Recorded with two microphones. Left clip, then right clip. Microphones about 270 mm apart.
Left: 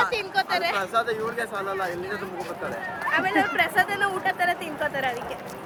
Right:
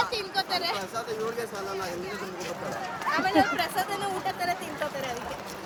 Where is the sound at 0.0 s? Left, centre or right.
Left.